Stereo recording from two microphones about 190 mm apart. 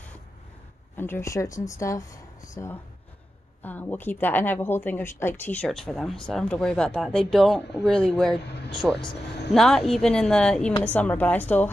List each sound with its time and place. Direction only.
0.9 s speech: 10° left (ahead or behind)
8.5 s vehicle: 60° left (ahead or behind)
9.5 s speech: centre (ahead or behind)